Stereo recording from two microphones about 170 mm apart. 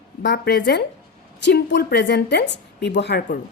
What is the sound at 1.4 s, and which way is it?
A woman's voice, 90° left.